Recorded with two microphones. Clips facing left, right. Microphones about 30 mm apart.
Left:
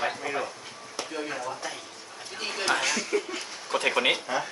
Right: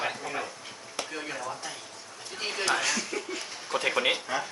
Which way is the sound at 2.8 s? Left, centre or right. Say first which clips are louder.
Left 3 dB; centre.